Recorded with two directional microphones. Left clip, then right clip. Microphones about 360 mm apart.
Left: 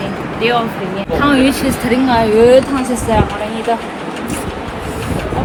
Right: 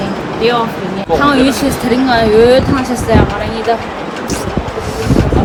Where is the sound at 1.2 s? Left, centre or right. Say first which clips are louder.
Right 1 dB; centre.